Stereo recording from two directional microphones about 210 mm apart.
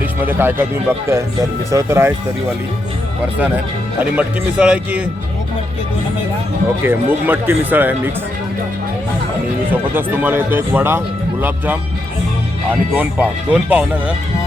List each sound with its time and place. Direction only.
0.0 s speech: 10° right (ahead or behind)
4.1 s speech: 5° right (ahead or behind)
6.8 s speech: 10° right (ahead or behind)
9.9 s speech: 10° right (ahead or behind)
12.9 s speech: 5° right (ahead or behind)